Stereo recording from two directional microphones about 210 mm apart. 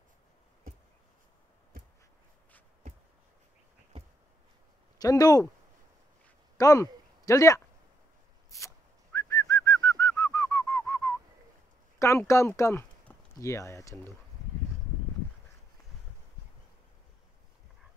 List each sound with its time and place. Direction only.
4.9 s speech: 15° left (ahead or behind)
6.6 s speech: 15° left (ahead or behind)
8.5 s bird: 15° left (ahead or behind)
12.0 s speech: 15° left (ahead or behind)